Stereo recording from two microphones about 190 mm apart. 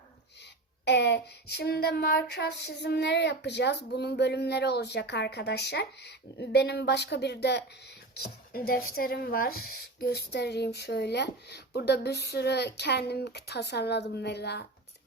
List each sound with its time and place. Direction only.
0.3 s child singing: 65° left (ahead or behind)